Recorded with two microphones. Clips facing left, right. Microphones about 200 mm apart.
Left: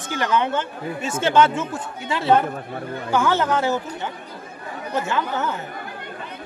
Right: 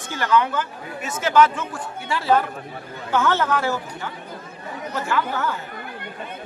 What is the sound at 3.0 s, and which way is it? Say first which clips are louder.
Speech: left 1 dB; 10° left (ahead or behind).